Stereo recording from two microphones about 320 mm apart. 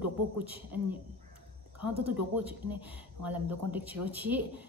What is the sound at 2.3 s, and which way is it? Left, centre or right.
A woman's voice, centre.